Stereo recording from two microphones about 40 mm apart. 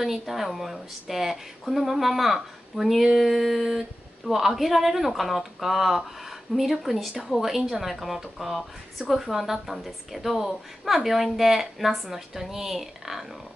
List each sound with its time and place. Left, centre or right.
0.0 s a woman's voice: centre